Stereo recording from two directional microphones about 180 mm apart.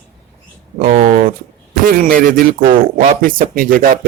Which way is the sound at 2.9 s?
45° right (ahead or behind).